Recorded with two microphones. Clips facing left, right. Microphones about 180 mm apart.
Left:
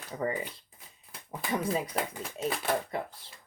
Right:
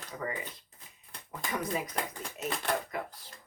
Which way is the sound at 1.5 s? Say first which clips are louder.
Left 4 dB; 30° left (ahead or behind).